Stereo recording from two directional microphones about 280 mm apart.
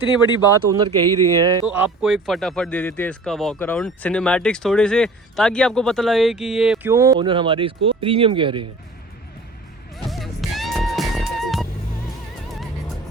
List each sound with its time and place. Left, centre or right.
0.7 s speech: centre
10.0 s music: centre